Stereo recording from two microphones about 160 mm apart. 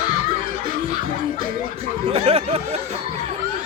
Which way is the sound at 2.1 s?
35° right (ahead or behind).